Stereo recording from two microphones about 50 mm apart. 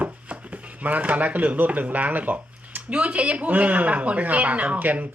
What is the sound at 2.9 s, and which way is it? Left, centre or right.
Speech, right.